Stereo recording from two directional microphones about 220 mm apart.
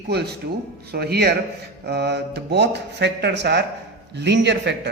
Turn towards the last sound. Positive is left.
turn(degrees=-50)  # may be behind; listen again after turning